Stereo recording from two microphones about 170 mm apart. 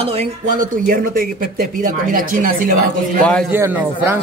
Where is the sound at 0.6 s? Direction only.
55° right (ahead or behind).